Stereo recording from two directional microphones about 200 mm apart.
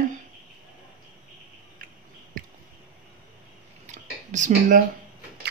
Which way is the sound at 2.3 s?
45° right (ahead or behind).